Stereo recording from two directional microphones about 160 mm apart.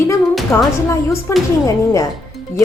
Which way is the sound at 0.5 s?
15° left (ahead or behind).